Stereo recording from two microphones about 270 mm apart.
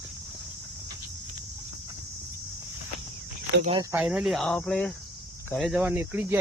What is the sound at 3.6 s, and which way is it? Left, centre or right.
Speech, centre.